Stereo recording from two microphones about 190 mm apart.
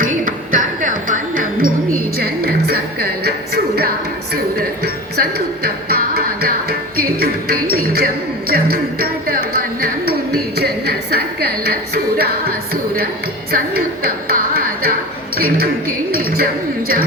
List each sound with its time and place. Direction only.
0.0 s music: 45° right (ahead or behind)
15.4 s speech: 50° right (ahead or behind)
16.1 s a sound: 50° right (ahead or behind)